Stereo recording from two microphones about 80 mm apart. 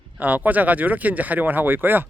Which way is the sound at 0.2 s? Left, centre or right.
Right.